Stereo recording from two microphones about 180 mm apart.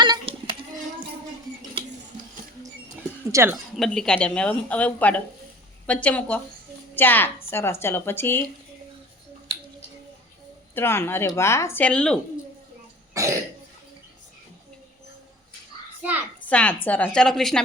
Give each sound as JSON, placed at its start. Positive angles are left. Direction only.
{"t": 0.0, "sound": "child singing", "side_deg": -25}
{"t": 3.3, "sound": "a woman's voice", "side_deg": -15}
{"t": 3.8, "sound": "a woman's voice", "side_deg": 5}
{"t": 10.8, "sound": "a woman's voice", "side_deg": 15}
{"t": 13.2, "sound": "cough", "side_deg": -15}
{"t": 16.0, "sound": "a sound", "side_deg": -10}
{"t": 16.5, "sound": "a woman's voice", "side_deg": 5}